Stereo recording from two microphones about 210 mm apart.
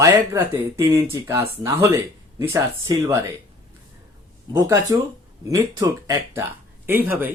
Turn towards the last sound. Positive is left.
turn(degrees=-10)  # may be behind; listen again after turning